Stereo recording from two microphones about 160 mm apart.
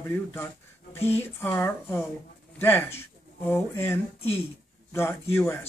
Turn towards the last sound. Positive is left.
turn(degrees=15)  # may be behind; listen again after turning